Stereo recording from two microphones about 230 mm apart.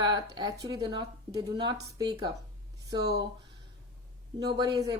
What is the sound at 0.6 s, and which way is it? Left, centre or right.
Speech, centre.